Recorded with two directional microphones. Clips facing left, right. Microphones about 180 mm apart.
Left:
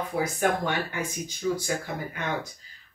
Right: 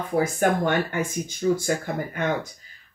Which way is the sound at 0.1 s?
50° right (ahead or behind).